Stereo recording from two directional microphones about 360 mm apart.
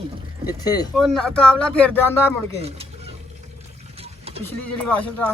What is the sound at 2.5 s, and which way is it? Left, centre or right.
Speech, centre.